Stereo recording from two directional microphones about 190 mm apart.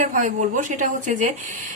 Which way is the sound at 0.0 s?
40° right (ahead or behind).